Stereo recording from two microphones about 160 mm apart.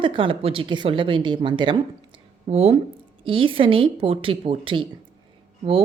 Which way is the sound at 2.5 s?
40° right (ahead or behind).